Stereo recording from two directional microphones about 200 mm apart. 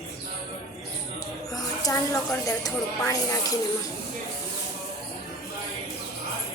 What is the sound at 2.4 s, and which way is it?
Speech, 15° left (ahead or behind).